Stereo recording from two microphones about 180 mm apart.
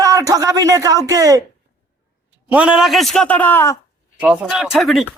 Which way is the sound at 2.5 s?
5° right (ahead or behind).